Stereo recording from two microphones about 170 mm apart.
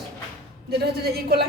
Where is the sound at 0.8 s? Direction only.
65° right (ahead or behind).